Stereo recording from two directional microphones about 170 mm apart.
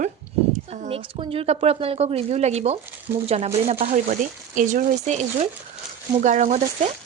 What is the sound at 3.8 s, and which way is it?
Speech, 50° right (ahead or behind).